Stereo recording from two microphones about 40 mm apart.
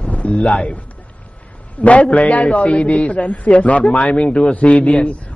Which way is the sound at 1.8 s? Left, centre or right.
Left.